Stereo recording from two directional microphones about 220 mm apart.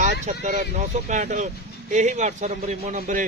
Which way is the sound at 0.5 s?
35° right (ahead or behind).